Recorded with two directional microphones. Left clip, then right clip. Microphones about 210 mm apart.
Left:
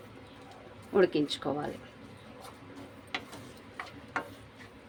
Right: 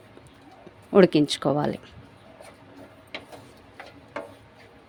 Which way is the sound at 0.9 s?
40° right (ahead or behind).